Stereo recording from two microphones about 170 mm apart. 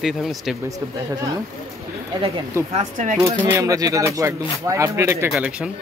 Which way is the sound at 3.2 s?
20° right (ahead or behind).